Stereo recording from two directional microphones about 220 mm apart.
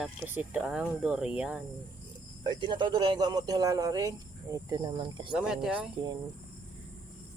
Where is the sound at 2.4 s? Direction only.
20° right (ahead or behind).